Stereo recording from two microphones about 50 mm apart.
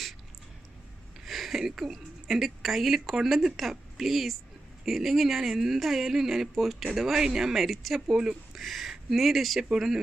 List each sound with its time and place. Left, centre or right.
1.2 s speech: centre
8.1 s speech: centre
8.5 s speech: centre